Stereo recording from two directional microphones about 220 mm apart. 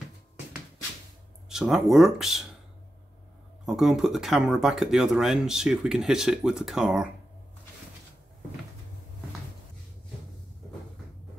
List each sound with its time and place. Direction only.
1.5 s speech: centre (ahead or behind)
3.6 s speech: centre (ahead or behind)